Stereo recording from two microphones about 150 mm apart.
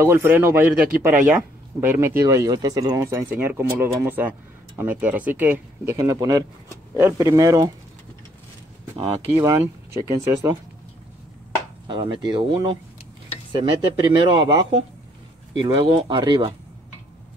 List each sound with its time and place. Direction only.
0.0 s speech: 15° right (ahead or behind)
10.0 s speech: 20° right (ahead or behind)
11.9 s speech: 35° right (ahead or behind)